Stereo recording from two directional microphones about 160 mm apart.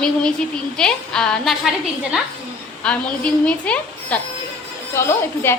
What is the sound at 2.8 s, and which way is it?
A woman's voice, 5° left (ahead or behind).